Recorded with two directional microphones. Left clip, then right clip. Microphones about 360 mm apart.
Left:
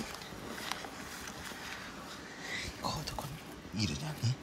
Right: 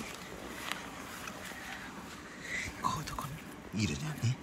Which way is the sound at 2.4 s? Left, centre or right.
Centre.